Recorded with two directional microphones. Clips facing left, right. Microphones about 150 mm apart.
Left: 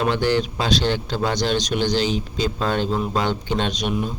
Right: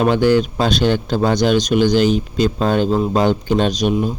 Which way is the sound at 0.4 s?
55° right (ahead or behind).